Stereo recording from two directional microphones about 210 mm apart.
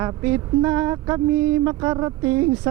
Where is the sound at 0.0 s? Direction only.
15° right (ahead or behind).